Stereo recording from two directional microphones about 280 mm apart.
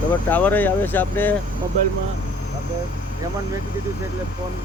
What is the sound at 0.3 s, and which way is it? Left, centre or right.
Speech, centre.